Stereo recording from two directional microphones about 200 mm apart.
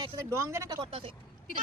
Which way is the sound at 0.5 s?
20° right (ahead or behind).